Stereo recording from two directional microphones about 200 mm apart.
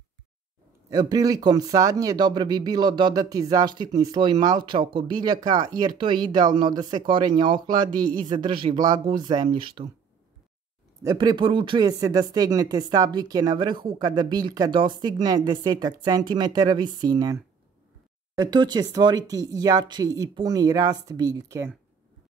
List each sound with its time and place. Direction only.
0.8 s speech: 20° right (ahead or behind)
11.0 s speech: 20° right (ahead or behind)
18.4 s speech: 20° right (ahead or behind)